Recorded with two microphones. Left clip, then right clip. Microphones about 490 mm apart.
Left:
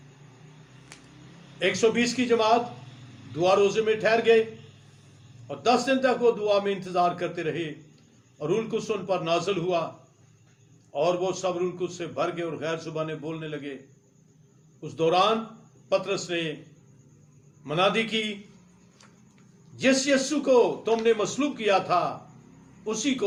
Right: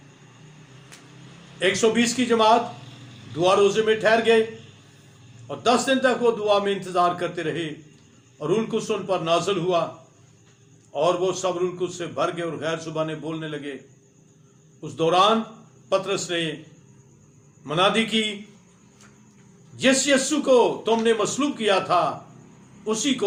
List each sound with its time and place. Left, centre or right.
1.5 s a man's voice: left
5.5 s a man's voice: left
10.9 s a man's voice: left
14.8 s a man's voice: left
17.7 s a man's voice: left
19.7 s a man's voice: left